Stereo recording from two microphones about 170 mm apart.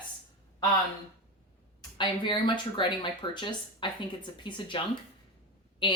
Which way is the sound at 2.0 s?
30° left (ahead or behind).